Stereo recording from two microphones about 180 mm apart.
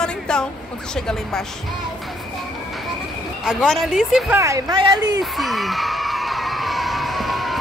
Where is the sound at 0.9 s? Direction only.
5° left (ahead or behind).